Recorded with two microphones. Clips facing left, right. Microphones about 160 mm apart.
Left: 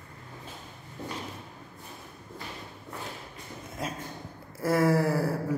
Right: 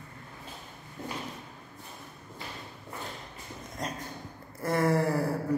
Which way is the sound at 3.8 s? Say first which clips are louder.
Left 1 dB; 5° left (ahead or behind).